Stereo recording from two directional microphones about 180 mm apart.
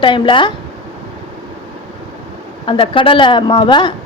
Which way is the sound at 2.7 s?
30° left (ahead or behind).